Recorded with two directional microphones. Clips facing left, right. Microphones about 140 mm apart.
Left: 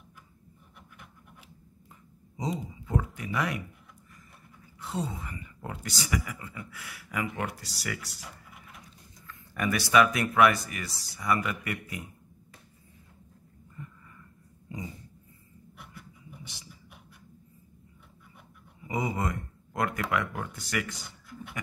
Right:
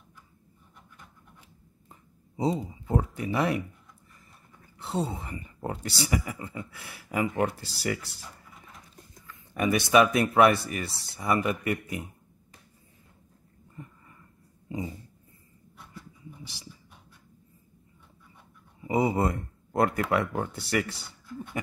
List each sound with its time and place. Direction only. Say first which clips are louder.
2.3 s speech: right 6 dB; 30° right (ahead or behind)
4.7 s speech: right 4 dB; 30° right (ahead or behind)
14.7 s dog: right 6 dB; 25° right (ahead or behind)
18.8 s speech: right 6 dB; 30° right (ahead or behind)